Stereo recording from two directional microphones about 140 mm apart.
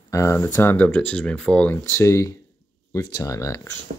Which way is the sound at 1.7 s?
15° left (ahead or behind).